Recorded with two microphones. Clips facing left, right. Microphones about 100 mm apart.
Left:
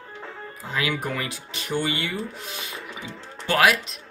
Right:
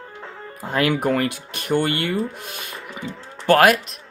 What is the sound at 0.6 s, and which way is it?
Speech, 55° right (ahead or behind).